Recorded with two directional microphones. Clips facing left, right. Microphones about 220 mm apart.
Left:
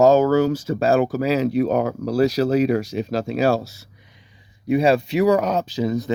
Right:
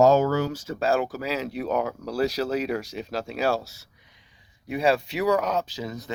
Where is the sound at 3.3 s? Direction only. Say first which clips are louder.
Left 6 dB; 15° left (ahead or behind).